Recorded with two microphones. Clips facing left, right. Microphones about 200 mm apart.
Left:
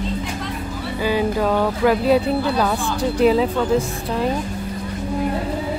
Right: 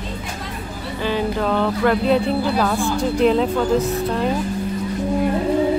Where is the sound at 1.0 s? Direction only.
10° left (ahead or behind).